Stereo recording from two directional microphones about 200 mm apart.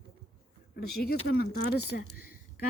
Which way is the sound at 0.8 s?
50° left (ahead or behind).